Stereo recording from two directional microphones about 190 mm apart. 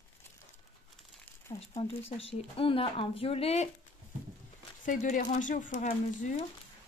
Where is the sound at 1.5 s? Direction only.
30° left (ahead or behind).